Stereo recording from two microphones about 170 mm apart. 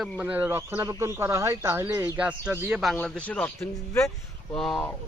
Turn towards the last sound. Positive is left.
turn(degrees=5)  # may be behind; listen again after turning